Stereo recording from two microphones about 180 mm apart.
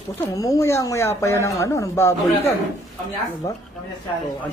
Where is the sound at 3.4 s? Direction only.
20° left (ahead or behind).